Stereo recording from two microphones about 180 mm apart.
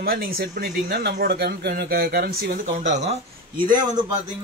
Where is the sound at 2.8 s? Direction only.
40° right (ahead or behind).